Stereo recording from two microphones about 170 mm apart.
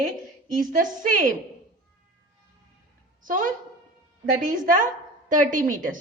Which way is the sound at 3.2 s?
50° right (ahead or behind).